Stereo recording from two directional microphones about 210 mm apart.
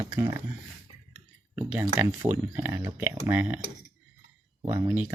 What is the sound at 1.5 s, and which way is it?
Speech, 10° right (ahead or behind).